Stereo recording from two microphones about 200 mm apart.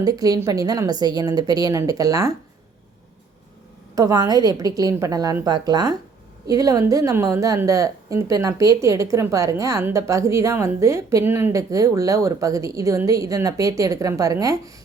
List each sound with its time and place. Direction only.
0.0 s a woman's voice: 20° right (ahead or behind)
3.9 s a woman's voice: 20° right (ahead or behind)